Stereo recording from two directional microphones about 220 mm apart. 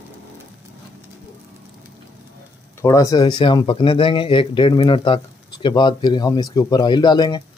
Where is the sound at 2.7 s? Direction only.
15° left (ahead or behind).